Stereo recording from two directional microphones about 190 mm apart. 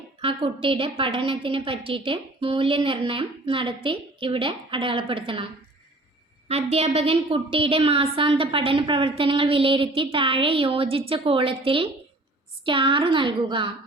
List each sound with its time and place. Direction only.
0.2 s a woman's voice: 30° right (ahead or behind)
6.5 s a woman's voice: 35° right (ahead or behind)